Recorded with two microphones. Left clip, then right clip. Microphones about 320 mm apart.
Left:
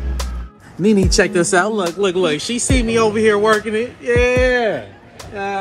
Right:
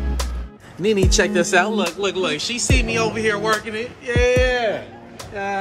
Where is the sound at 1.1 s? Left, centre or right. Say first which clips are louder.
Left 3 dB; centre.